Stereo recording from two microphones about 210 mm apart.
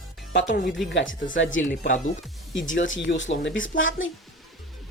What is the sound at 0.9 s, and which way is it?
Speech, 65° left (ahead or behind).